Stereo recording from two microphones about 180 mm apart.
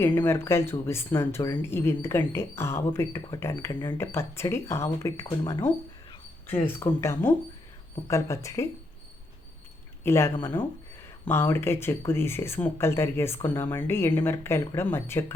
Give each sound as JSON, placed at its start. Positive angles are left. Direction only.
{"t": 0.0, "sound": "speech", "side_deg": 10}
{"t": 10.0, "sound": "speech", "side_deg": 15}